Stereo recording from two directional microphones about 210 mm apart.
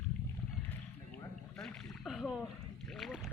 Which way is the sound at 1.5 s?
Centre (ahead or behind).